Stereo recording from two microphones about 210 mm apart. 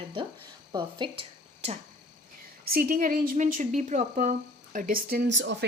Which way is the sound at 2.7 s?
45° right (ahead or behind).